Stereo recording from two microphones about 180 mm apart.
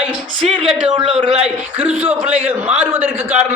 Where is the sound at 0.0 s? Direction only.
35° right (ahead or behind).